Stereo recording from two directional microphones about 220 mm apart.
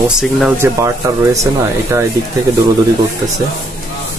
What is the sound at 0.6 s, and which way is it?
Speech, 15° right (ahead or behind).